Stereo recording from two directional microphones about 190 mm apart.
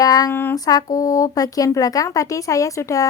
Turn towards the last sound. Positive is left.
turn(degrees=15)  # may be behind; listen again after turning